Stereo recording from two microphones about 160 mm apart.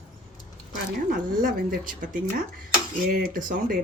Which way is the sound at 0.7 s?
60° right (ahead or behind).